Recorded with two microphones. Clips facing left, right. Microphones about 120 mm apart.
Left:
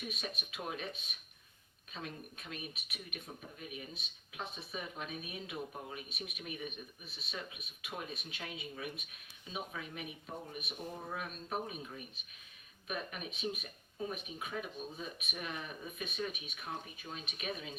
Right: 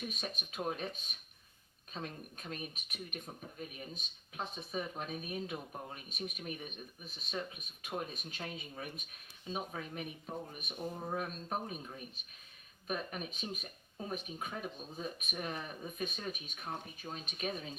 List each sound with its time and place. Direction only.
0.1 s speech: 40° right (ahead or behind)